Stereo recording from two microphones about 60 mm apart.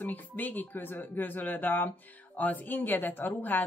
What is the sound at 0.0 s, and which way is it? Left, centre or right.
Speech, left.